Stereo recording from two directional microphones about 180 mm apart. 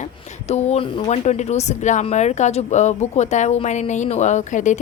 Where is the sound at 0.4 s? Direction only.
35° left (ahead or behind).